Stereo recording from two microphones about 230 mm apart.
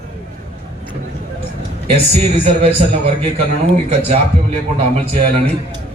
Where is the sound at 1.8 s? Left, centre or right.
Right.